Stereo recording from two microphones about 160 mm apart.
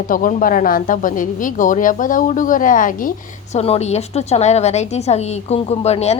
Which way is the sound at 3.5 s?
40° left (ahead or behind).